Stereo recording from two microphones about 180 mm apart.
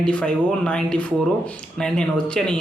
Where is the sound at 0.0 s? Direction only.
5° left (ahead or behind).